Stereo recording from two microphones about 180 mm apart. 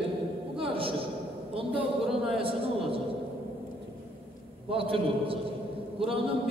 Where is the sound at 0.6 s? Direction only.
30° right (ahead or behind).